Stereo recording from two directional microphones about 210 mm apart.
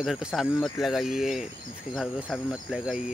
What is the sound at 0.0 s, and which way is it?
Speech, centre (ahead or behind).